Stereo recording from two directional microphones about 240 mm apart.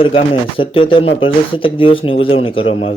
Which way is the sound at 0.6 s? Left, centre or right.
Left.